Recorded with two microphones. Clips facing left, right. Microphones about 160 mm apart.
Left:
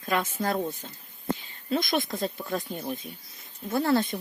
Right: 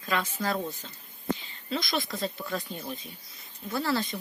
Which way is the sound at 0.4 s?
50° left (ahead or behind).